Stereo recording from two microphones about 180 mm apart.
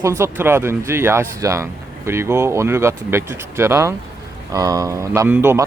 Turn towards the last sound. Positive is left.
turn(degrees=-10)  # may be behind; listen again after turning